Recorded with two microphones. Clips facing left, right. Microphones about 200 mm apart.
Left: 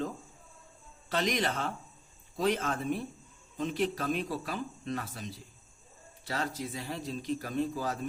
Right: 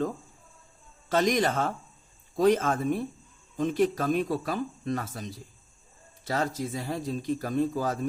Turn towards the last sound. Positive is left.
turn(degrees=-45)  # may be behind; listen again after turning